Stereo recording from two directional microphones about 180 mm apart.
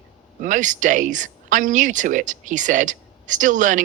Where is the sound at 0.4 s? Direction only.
45° right (ahead or behind).